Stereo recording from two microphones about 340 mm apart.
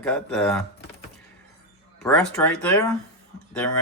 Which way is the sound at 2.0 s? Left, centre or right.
Centre.